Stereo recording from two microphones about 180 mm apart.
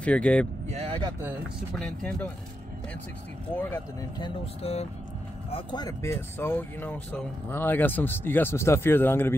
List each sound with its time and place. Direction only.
0.0 s speech: 5° left (ahead or behind)
0.7 s vehicle: 35° right (ahead or behind)
1.8 s speech: 5° left (ahead or behind)
4.2 s speech: 35° left (ahead or behind); by 9.3 s 10° left (ahead or behind)